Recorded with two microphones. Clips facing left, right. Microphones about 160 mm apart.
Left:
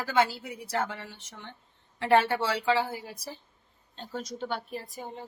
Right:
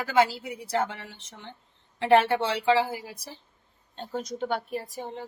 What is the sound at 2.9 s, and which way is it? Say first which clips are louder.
Speech: right 2 dB; 10° right (ahead or behind).